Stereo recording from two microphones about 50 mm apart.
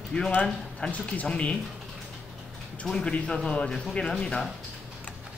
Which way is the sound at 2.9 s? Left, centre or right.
Left.